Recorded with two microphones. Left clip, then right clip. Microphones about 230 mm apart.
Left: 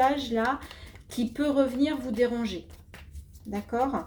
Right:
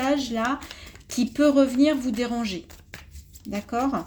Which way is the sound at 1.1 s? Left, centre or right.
Right.